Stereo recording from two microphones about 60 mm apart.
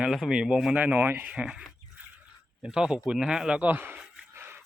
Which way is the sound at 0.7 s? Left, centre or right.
Right.